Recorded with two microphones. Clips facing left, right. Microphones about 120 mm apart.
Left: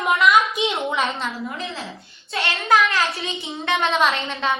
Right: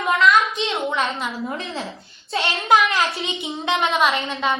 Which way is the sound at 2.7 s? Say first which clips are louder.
Right 1 dB; 25° right (ahead or behind).